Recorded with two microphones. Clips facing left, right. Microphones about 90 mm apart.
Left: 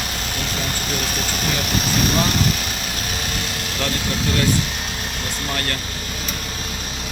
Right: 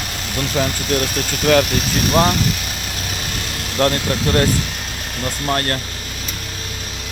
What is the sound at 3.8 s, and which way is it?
Speech, 45° right (ahead or behind).